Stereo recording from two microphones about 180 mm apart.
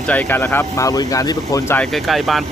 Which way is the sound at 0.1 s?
10° left (ahead or behind).